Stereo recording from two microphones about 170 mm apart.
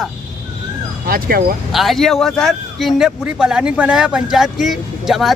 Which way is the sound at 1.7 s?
Centre (ahead or behind).